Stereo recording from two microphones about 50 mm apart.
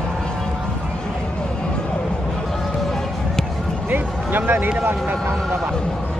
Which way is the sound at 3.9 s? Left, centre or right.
Right.